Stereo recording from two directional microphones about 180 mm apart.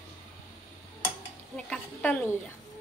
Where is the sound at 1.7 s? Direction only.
5° left (ahead or behind).